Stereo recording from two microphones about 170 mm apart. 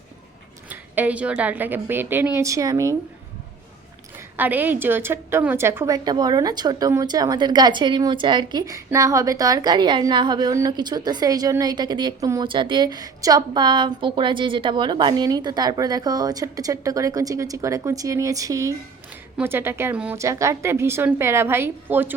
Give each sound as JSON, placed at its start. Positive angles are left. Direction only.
{"t": 0.7, "sound": "a woman's voice", "side_deg": -10}
{"t": 4.2, "sound": "a woman's voice", "side_deg": -10}